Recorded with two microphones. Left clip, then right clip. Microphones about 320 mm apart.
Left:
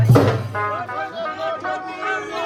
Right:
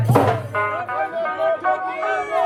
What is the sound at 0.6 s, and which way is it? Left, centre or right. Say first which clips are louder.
Music: right 2 dB; right.